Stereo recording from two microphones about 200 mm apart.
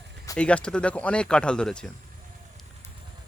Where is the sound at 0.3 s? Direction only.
5° left (ahead or behind).